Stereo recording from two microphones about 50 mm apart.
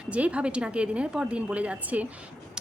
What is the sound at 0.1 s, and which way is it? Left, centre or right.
Speech, right.